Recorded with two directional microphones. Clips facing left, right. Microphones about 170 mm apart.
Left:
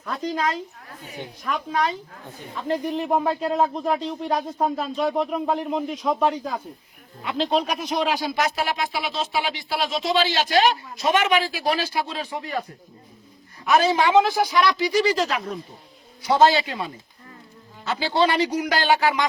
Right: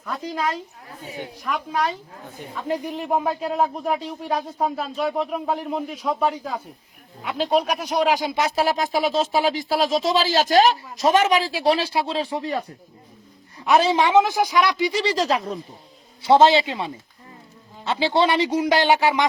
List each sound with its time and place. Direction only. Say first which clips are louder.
0.0 s a man's voice: left 1 dB; 5° right (ahead or behind)
8.4 s speech: right 3 dB; 35° right (ahead or behind)
13.7 s a man's voice: right 1 dB; 30° right (ahead or behind)
14.2 s a man's voice: right 1 dB; 15° right (ahead or behind)
15.1 s a man's voice: right 2 dB; 35° right (ahead or behind)